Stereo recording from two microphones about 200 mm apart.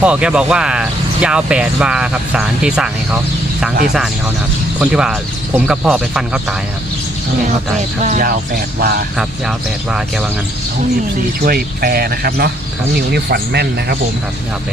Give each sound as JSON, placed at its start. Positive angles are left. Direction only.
{"t": 0.0, "sound": "speech", "side_deg": -5}
{"t": 4.8, "sound": "speech", "side_deg": -5}
{"t": 8.0, "sound": "speech", "side_deg": -40}
{"t": 9.1, "sound": "speech", "side_deg": -5}
{"t": 11.3, "sound": "speech", "side_deg": -50}